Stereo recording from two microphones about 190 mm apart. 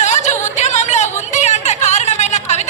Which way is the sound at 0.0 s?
40° left (ahead or behind).